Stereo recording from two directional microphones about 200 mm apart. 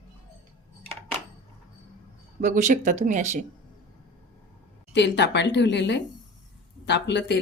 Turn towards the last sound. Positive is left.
turn(degrees=60)  # may be behind; listen again after turning